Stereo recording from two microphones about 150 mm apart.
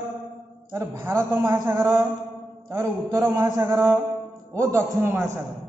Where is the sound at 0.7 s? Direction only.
15° right (ahead or behind).